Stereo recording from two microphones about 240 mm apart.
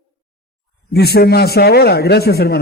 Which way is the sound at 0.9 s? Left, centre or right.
Left.